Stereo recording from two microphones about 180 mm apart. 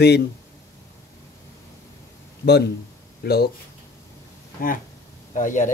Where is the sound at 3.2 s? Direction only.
60° left (ahead or behind).